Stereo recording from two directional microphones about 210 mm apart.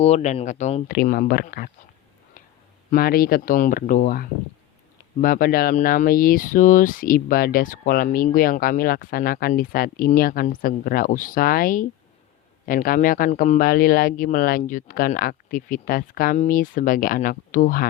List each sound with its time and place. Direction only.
0.0 s a man's voice: 30° left (ahead or behind)
2.9 s a man's voice: 45° left (ahead or behind)